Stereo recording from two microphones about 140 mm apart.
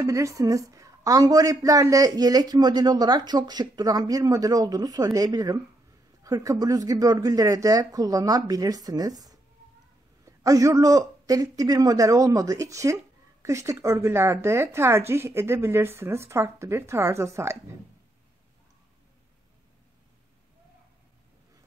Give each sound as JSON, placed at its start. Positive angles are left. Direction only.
{"t": 0.0, "sound": "a man's voice", "side_deg": -25}